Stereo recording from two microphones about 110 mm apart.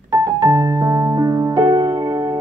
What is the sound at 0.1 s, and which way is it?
Music, 35° right (ahead or behind).